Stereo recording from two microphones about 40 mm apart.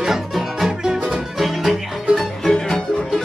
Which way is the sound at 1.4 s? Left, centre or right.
Centre.